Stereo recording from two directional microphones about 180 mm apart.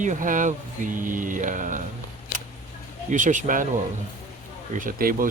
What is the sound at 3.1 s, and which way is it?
Speech, 45° right (ahead or behind).